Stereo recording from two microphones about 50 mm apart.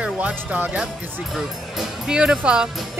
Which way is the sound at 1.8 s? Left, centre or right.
Centre.